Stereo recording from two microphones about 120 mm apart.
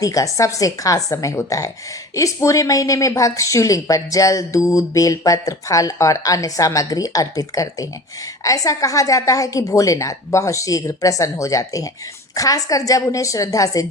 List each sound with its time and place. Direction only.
0.0 s a woman's voice: 30° left (ahead or behind)